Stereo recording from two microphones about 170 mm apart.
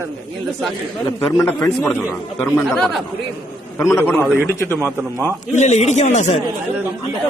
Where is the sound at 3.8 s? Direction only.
15° left (ahead or behind).